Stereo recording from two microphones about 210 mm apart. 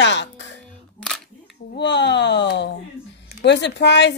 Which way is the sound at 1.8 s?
55° left (ahead or behind).